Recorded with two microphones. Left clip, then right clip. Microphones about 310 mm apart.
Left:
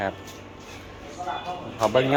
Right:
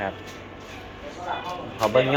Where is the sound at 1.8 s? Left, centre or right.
Centre.